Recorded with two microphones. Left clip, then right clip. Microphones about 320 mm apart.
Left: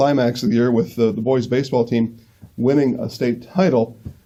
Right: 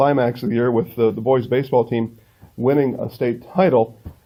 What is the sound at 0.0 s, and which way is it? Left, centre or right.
A man's voice, right.